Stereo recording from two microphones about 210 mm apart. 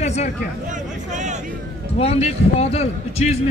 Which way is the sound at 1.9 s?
30° left (ahead or behind).